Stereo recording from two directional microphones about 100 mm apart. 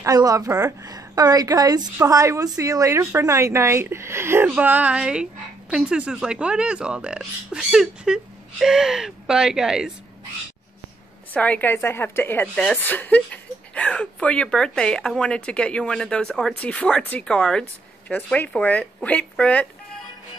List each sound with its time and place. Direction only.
0.0 s a woman's voice: 35° right (ahead or behind); by 9.9 s 5° right (ahead or behind)
11.3 s a woman's voice: 15° left (ahead or behind)